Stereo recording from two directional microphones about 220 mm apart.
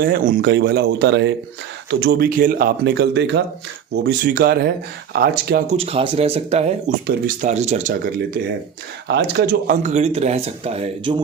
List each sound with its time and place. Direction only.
0.0 s speech: 45° right (ahead or behind)
5.7 s speech: 25° right (ahead or behind)
9.0 s speech: 45° right (ahead or behind); by 11.2 s 25° right (ahead or behind)